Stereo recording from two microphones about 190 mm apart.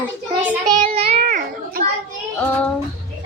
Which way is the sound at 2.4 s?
5° left (ahead or behind).